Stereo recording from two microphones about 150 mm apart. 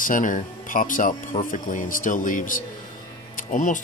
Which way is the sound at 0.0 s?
60° left (ahead or behind).